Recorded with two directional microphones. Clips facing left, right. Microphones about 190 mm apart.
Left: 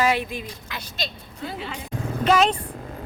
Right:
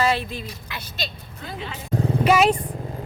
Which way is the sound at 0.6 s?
5° right (ahead or behind).